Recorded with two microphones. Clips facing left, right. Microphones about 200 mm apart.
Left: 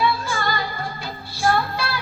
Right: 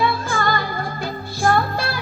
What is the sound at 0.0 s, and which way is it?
Music, 50° right (ahead or behind).